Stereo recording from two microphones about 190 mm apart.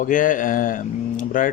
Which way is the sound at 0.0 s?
45° left (ahead or behind).